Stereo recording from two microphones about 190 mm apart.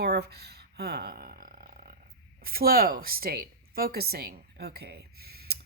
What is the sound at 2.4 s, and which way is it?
A woman's voice, 50° right (ahead or behind).